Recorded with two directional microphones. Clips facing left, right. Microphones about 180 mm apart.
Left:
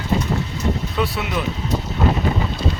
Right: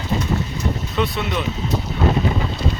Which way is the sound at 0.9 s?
5° left (ahead or behind).